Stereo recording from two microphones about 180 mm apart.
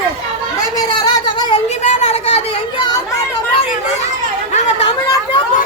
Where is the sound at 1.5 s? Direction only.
35° left (ahead or behind).